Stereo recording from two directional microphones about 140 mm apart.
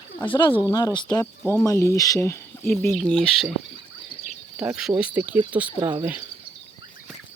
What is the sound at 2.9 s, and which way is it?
Speech, centre (ahead or behind).